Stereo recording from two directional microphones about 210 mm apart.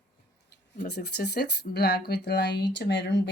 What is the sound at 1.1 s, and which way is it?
Speech, 50° left (ahead or behind).